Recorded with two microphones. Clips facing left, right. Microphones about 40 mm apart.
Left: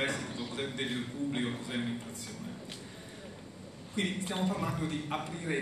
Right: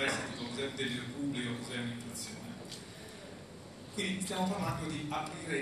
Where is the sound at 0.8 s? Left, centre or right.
Left.